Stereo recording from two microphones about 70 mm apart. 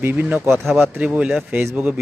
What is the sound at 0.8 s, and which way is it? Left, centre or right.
Speech, right.